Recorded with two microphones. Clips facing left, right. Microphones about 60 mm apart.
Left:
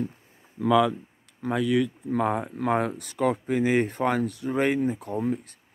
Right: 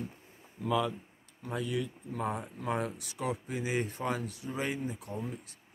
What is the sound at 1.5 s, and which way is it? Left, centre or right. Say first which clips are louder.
Speech: left 10 dB; left.